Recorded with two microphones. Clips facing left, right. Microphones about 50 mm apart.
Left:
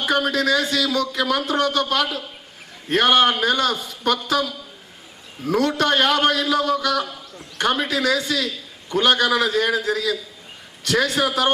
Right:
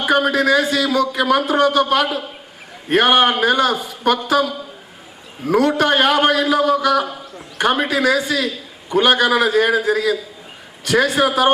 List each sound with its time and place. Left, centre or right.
0.0 s a man's voice: right